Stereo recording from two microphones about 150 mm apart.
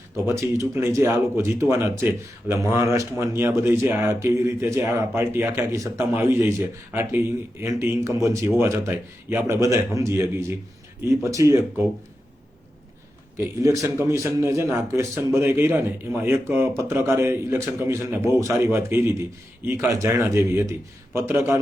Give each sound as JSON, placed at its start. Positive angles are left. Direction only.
{"t": 0.3, "sound": "a man's voice", "side_deg": -20}
{"t": 13.3, "sound": "a man's voice", "side_deg": -20}